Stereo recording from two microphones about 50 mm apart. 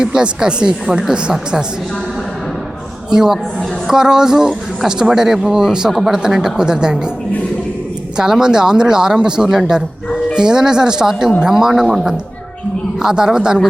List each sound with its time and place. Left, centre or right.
0.0 s speech: centre
3.1 s speech: centre
8.1 s a man's voice: centre